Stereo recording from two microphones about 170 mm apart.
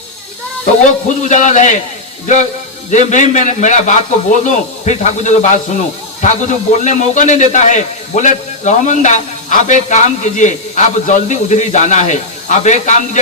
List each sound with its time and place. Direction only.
1.2 s a man's voice: 45° left (ahead or behind)